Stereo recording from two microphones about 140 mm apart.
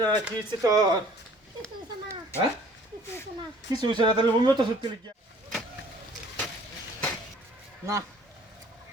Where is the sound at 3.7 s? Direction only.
35° right (ahead or behind).